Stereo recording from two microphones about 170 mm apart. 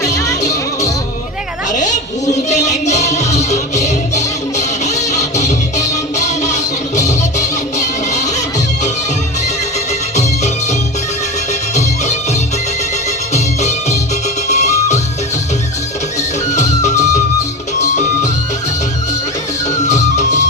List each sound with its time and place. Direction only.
0.0 s music: 20° left (ahead or behind)
1.7 s a child's voice: 45° left (ahead or behind)
2.5 s music: 45° left (ahead or behind)
10.2 s music: 40° left (ahead or behind)
16.5 s music: 45° left (ahead or behind)
19.7 s music: 45° left (ahead or behind)